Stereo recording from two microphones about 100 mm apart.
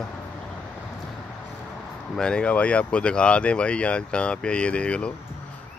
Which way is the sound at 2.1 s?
10° left (ahead or behind).